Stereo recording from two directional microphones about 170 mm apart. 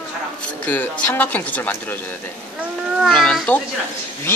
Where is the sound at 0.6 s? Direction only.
10° left (ahead or behind).